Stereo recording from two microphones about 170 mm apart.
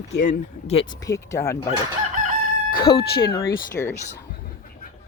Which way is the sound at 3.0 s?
70° left (ahead or behind).